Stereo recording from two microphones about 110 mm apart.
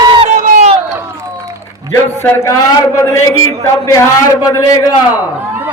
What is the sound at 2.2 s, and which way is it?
Speech, 25° left (ahead or behind).